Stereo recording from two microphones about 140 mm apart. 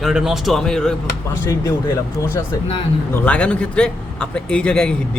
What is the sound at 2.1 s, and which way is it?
Speech, 20° left (ahead or behind).